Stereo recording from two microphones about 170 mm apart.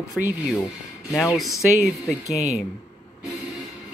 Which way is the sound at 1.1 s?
15° left (ahead or behind).